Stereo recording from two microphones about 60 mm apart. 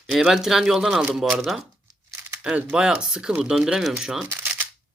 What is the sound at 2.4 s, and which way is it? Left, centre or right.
Speech, centre.